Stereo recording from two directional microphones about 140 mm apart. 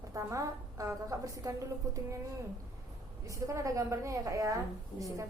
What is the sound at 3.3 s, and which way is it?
A woman's voice, 25° right (ahead or behind).